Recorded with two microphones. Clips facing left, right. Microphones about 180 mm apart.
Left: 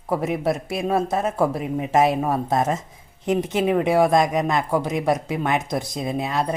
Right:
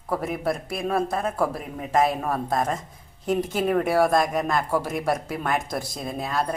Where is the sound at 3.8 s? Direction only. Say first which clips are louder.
Left 4 dB; 20° left (ahead or behind).